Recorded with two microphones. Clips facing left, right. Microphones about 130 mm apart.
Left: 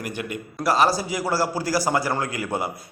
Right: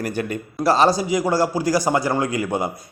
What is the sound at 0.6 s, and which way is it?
A man's voice, 25° right (ahead or behind).